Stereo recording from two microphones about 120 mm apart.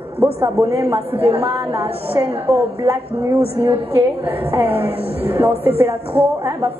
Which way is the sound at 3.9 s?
15° right (ahead or behind).